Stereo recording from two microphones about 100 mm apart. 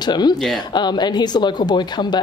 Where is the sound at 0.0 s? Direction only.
45° left (ahead or behind).